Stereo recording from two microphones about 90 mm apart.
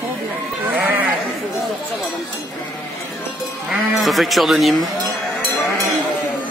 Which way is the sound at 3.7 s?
Centre (ahead or behind).